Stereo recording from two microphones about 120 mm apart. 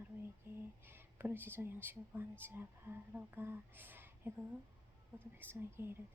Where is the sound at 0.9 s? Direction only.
20° right (ahead or behind).